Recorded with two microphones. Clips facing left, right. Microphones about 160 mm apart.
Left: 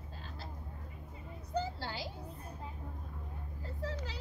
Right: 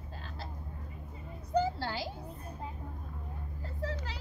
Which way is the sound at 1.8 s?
90° right.